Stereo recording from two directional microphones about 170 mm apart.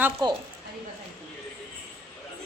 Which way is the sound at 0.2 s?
25° right (ahead or behind).